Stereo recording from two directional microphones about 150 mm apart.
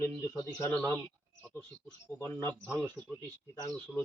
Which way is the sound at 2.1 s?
15° left (ahead or behind).